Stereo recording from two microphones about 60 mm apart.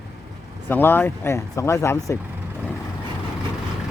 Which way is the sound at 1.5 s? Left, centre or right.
Left.